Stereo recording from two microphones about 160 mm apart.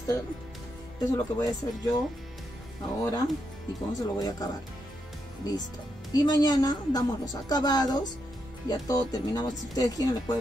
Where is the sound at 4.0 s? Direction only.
25° left (ahead or behind).